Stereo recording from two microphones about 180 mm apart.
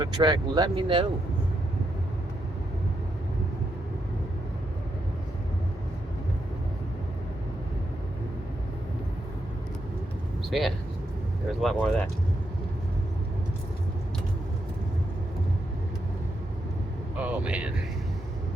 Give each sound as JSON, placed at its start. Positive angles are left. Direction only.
{"t": 0.0, "sound": "speech", "side_deg": -25}
{"t": 10.5, "sound": "speech", "side_deg": 0}
{"t": 17.2, "sound": "speech", "side_deg": -10}